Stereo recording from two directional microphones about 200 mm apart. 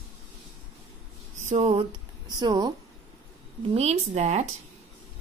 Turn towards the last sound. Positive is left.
turn(degrees=-35)  # may be behind; listen again after turning